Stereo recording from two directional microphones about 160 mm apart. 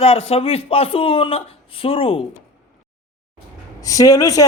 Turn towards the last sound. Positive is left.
turn(degrees=20)  # may be behind; listen again after turning